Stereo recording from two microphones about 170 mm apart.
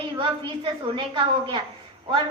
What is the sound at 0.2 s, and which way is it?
A woman's voice, 30° right (ahead or behind).